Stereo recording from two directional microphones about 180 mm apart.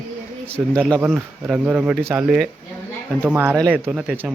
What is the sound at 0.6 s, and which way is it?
A man's voice, 10° right (ahead or behind).